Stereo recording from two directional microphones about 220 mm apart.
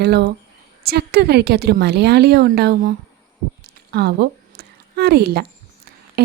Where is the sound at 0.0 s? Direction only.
50° right (ahead or behind).